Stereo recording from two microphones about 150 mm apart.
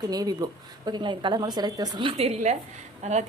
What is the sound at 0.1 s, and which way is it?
A woman's voice, 25° right (ahead or behind).